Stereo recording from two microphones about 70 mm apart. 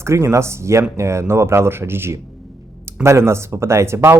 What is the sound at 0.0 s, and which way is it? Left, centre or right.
Speech, right.